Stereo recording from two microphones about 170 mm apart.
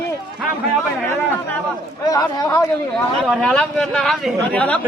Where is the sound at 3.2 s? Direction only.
5° left (ahead or behind).